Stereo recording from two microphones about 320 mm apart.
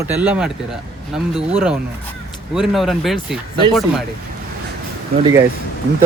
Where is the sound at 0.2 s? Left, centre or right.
Centre.